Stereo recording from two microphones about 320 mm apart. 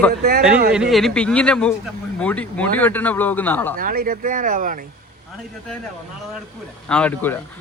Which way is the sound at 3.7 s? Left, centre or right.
Right.